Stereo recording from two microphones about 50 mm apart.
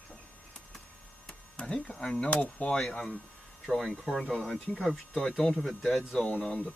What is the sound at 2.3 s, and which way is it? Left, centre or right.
Speech, left.